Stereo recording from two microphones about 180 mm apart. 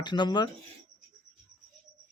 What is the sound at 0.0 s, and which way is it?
Speech, 25° left (ahead or behind).